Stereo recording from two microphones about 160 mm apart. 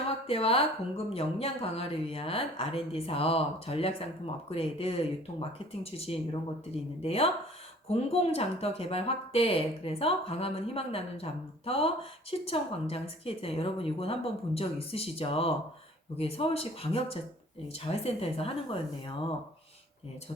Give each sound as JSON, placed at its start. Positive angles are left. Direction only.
{"t": 0.3, "sound": "speech", "side_deg": 35}